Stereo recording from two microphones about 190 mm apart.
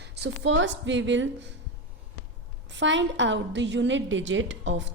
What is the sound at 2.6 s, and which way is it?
A woman's voice, 75° right (ahead or behind).